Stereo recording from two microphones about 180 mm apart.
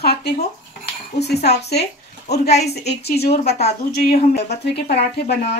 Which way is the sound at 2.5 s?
35° left (ahead or behind).